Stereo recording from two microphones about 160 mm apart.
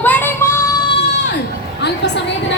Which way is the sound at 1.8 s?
90° left.